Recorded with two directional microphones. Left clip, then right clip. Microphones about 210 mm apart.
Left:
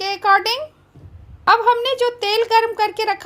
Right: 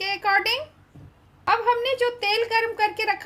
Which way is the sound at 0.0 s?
30° left (ahead or behind).